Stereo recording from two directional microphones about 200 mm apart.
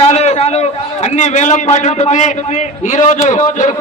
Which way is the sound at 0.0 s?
30° left (ahead or behind).